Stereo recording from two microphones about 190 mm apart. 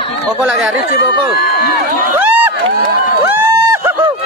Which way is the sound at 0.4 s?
5° right (ahead or behind).